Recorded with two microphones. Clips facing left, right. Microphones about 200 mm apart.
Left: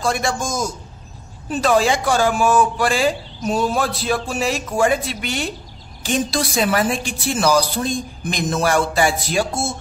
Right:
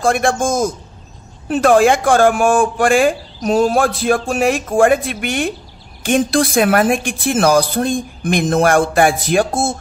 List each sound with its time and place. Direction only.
0.0 s a woman's voice: 50° right (ahead or behind)